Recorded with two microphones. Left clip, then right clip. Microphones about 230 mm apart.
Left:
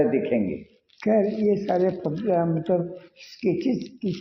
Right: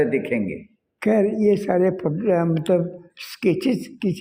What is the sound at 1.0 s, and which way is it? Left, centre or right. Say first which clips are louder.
Speech: right 3 dB; right.